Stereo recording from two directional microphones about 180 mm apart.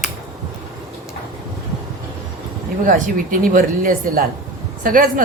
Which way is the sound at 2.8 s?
50° right (ahead or behind).